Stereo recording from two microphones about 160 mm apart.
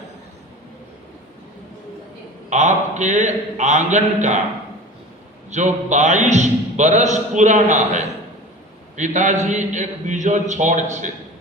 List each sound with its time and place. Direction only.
2.5 s a man's voice: 45° right (ahead or behind)
5.5 s a man's voice: 45° right (ahead or behind)